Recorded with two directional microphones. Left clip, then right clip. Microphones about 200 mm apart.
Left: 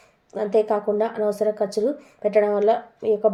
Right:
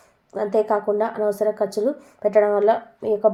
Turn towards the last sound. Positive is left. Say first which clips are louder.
# right 1 dB
turn(degrees=-20)  # may be behind; listen again after turning